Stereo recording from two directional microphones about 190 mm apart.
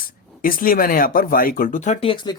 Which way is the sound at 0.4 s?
50° left (ahead or behind).